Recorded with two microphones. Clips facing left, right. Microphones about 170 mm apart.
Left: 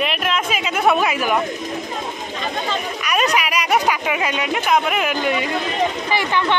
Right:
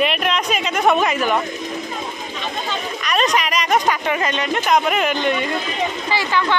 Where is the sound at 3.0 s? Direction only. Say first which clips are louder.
Right 1 dB; 10° left (ahead or behind).